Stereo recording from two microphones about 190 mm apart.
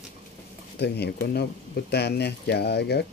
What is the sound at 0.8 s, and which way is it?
Speech, 60° left (ahead or behind).